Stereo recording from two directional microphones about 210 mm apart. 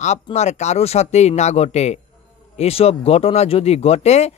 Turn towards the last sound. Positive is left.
turn(degrees=30)  # may be behind; listen again after turning